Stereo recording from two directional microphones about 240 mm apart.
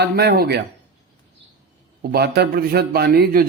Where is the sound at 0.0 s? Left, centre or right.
Right.